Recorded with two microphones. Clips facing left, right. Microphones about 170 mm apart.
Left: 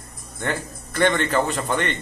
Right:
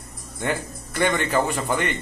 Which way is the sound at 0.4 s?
15° right (ahead or behind).